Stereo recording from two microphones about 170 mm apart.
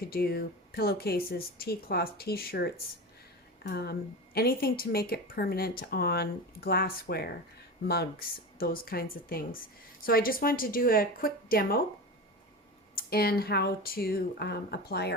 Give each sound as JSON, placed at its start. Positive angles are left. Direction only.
{"t": 0.1, "sound": "speech", "side_deg": 65}
{"t": 13.0, "sound": "speech", "side_deg": 65}